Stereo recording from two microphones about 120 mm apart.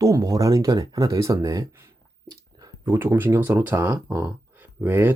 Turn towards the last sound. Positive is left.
turn(degrees=-15)  # may be behind; listen again after turning